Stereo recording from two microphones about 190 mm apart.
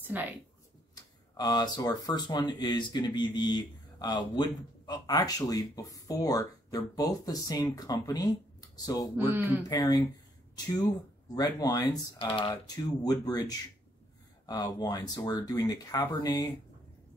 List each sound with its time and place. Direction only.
0.0 s speech: 10° right (ahead or behind)
1.3 s speech: 20° left (ahead or behind)
9.1 s a man's voice: 10° right (ahead or behind)
9.6 s speech: 20° left (ahead or behind)